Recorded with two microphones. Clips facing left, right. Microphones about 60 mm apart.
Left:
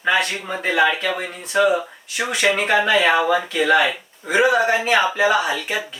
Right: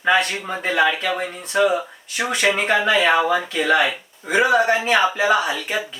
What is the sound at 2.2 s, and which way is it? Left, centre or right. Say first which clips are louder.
Speech: even; right.